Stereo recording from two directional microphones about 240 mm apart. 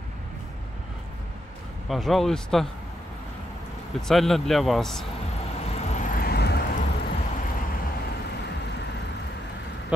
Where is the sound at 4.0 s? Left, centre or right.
Centre.